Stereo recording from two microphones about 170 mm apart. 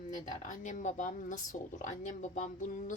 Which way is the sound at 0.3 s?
45° left (ahead or behind).